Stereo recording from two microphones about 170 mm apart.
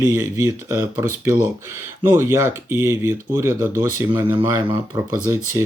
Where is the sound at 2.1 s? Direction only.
15° right (ahead or behind).